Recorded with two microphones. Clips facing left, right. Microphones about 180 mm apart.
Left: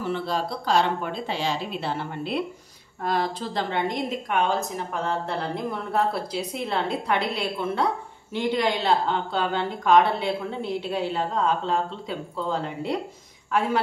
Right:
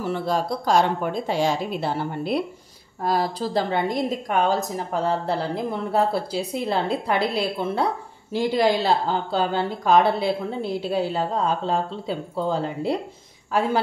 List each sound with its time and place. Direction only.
0.0 s a woman's voice: 45° right (ahead or behind)